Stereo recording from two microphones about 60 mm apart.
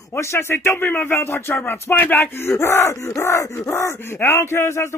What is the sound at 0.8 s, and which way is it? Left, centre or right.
Speech, left.